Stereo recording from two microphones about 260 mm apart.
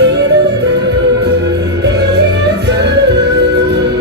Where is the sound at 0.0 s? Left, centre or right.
Right.